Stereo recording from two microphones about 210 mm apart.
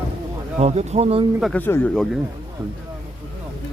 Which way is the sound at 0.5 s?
30° right (ahead or behind).